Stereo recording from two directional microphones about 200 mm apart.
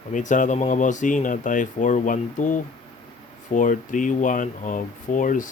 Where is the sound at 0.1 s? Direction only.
40° left (ahead or behind).